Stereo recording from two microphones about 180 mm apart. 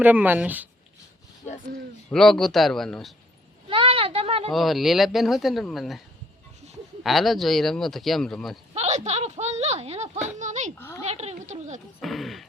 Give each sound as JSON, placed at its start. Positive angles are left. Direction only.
{"t": 0.0, "sound": "speech", "side_deg": -10}
{"t": 2.0, "sound": "speech", "side_deg": 0}
{"t": 3.7, "sound": "a sound", "side_deg": -30}
{"t": 4.5, "sound": "speech", "side_deg": 0}
{"t": 7.0, "sound": "speech", "side_deg": 0}
{"t": 8.7, "sound": "speech", "side_deg": -40}
{"t": 10.8, "sound": "speech", "side_deg": 15}
{"t": 11.0, "sound": "speech", "side_deg": -35}
{"t": 11.9, "sound": "speech", "side_deg": 0}